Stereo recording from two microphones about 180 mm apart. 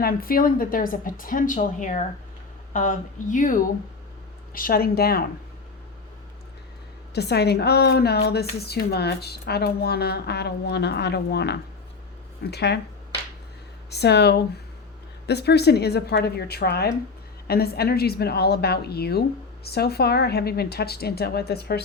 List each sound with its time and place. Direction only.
0.0 s a woman's voice: 55° left (ahead or behind)
7.1 s a woman's voice: 65° left (ahead or behind)
13.9 s a woman's voice: 65° left (ahead or behind)